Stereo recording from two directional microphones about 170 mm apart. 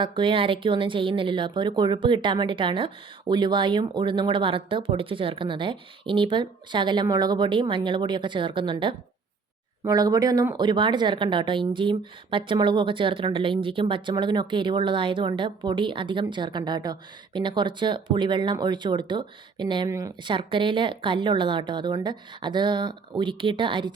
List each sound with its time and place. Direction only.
0.0 s speech: 30° right (ahead or behind)